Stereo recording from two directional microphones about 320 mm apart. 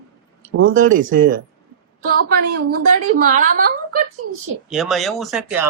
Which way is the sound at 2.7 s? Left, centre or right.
Right.